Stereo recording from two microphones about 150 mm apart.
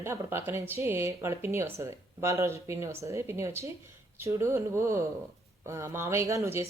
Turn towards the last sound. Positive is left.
turn(degrees=-20)  # may be behind; listen again after turning